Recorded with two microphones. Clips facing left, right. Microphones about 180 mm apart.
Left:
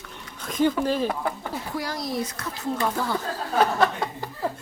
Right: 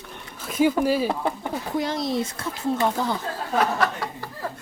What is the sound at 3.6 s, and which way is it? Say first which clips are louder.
Speech: left 2 dB; 25° left (ahead or behind).